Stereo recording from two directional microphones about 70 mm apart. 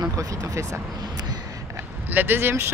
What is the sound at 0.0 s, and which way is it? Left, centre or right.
Speech, right.